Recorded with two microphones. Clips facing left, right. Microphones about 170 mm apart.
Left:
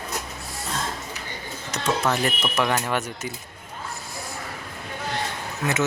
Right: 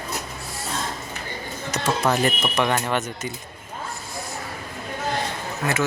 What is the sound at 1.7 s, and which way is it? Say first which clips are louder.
Speech: right 2 dB; 10° right (ahead or behind).